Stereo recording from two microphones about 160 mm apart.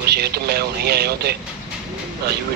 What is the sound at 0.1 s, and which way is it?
Speech, 85° right.